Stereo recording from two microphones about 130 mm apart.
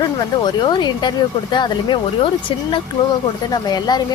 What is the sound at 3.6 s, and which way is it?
Speech, 30° left (ahead or behind).